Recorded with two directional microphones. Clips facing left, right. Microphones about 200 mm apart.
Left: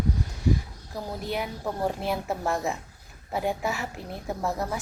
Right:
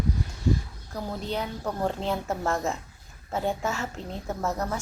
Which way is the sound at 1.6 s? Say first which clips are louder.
Even; 10° left (ahead or behind).